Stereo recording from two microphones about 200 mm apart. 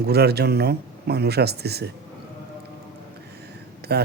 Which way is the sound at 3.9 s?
55° right (ahead or behind).